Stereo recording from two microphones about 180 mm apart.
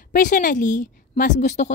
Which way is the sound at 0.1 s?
45° left (ahead or behind).